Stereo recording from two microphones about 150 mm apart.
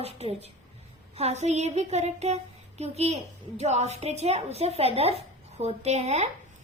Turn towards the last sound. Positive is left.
turn(degrees=-45)  # may be behind; listen again after turning